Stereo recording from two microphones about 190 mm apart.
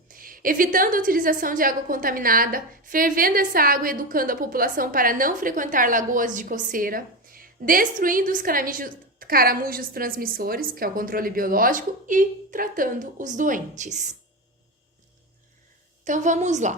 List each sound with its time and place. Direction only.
0.1 s a woman's voice: 50° right (ahead or behind)
16.0 s a woman's voice: 40° right (ahead or behind)